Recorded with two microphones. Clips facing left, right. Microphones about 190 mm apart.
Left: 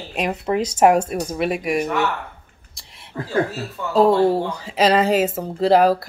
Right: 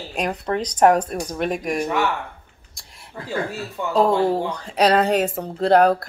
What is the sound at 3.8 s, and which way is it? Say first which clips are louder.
Speech: right 3 dB; 20° right (ahead or behind).